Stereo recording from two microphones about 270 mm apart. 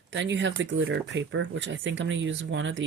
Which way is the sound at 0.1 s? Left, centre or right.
Right.